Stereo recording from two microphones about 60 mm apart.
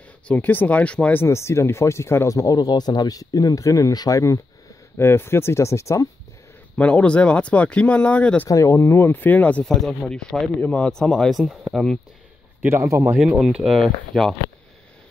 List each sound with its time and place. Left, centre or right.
0.3 s speech: left
1.1 s speech: left
2.2 s speech: left
4.9 s speech: left
6.8 s speech: left
8.5 s speech: left
9.7 s speech: centre
12.8 s speech: right
13.2 s speech: centre
13.7 s speech: centre